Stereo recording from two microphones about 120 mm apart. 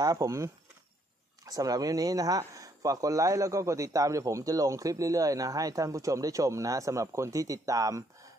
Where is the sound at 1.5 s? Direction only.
30° right (ahead or behind).